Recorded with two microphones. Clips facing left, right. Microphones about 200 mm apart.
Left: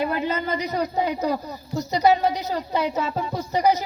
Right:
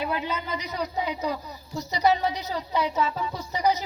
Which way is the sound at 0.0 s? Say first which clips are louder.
Left 5 dB; 50° left (ahead or behind).